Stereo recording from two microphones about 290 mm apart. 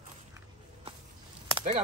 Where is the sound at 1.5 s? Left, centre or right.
Centre.